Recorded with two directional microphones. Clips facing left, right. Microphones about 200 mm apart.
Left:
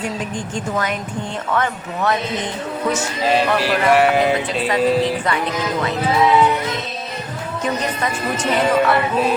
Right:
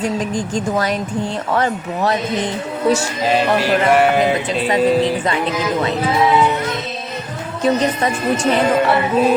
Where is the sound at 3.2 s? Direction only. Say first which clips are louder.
Right 1 dB; centre (ahead or behind).